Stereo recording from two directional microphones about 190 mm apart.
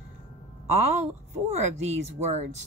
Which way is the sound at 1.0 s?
35° right (ahead or behind).